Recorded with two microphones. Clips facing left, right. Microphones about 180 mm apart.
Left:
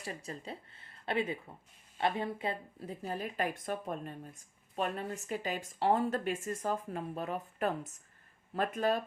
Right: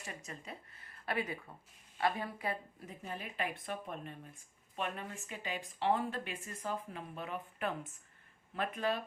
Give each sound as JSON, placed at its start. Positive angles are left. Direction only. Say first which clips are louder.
{"t": 0.0, "sound": "a woman's voice", "louder": "left 5 dB", "side_deg": 35}